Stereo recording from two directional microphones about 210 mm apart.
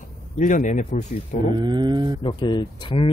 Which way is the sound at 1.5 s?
20° right (ahead or behind).